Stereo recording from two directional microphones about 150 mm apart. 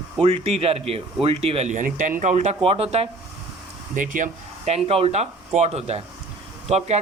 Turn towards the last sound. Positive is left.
turn(degrees=-50)  # may be behind; listen again after turning